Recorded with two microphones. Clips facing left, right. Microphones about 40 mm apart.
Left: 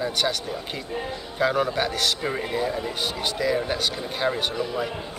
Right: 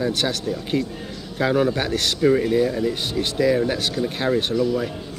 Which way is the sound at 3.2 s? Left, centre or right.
Centre.